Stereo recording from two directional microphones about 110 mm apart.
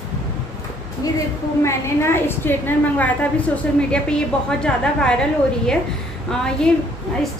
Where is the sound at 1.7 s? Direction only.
25° left (ahead or behind); by 6.7 s 5° left (ahead or behind).